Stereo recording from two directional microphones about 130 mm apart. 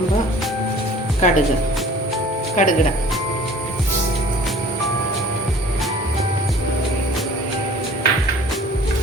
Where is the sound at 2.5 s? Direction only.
70° left (ahead or behind).